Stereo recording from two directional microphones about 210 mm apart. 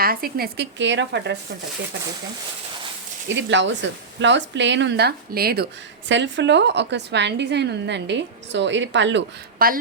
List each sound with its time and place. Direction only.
0.0 s speech: 45° right (ahead or behind)
3.3 s a woman's voice: 60° right (ahead or behind)
6.1 s a woman's voice: 60° right (ahead or behind)